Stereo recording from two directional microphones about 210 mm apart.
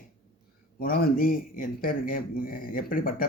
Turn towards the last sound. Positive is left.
turn(degrees=45)  # may be behind; listen again after turning